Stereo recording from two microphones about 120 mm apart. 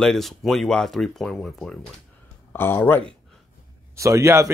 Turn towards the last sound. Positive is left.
turn(degrees=-25)  # may be behind; listen again after turning